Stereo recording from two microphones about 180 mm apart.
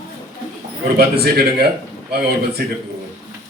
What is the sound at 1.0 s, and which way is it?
A man's voice, 60° right (ahead or behind).